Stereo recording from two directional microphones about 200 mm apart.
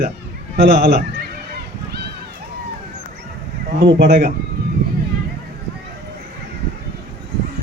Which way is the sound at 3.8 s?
55° right (ahead or behind).